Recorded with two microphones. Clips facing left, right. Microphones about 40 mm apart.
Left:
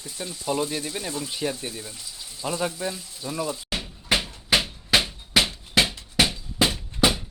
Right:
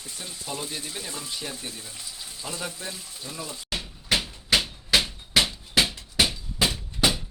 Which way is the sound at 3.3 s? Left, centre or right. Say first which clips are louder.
Left 9 dB; left.